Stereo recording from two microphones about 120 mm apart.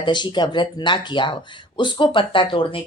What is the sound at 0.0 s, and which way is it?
A woman's voice, 40° left (ahead or behind).